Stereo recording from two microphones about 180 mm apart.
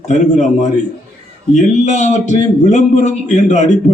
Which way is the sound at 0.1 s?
40° left (ahead or behind).